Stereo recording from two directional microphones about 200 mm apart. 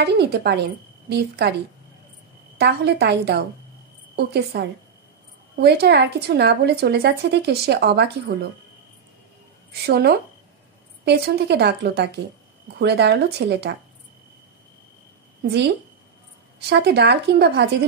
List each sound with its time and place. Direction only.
0.0 s speech: 55° right (ahead or behind)
2.5 s a woman's voice: 55° right (ahead or behind)
9.7 s a woman's voice: 55° right (ahead or behind)
16.5 s speech: 55° right (ahead or behind)